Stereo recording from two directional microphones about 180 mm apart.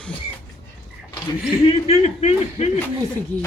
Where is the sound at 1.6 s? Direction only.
35° left (ahead or behind).